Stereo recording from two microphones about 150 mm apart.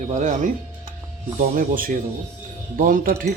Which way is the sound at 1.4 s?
65° right (ahead or behind).